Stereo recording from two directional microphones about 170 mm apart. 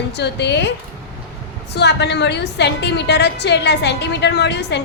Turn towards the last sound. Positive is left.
turn(degrees=90)